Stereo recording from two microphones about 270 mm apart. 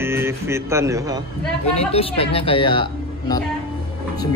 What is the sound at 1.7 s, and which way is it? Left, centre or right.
Speech, left.